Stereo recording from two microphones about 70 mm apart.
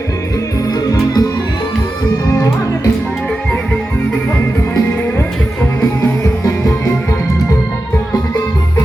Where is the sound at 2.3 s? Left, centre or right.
Left.